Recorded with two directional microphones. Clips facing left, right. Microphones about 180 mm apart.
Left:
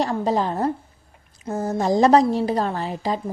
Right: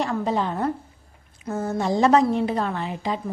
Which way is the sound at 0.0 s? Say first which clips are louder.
Left 2 dB; 35° left (ahead or behind).